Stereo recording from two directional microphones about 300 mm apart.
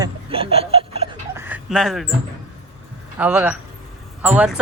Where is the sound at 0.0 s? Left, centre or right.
Centre.